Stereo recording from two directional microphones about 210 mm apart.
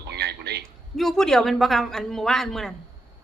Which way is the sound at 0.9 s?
Centre (ahead or behind).